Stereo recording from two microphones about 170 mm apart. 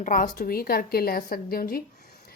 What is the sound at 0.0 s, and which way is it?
Speech, 50° left (ahead or behind).